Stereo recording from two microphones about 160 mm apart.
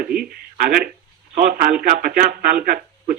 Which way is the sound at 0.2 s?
65° right (ahead or behind).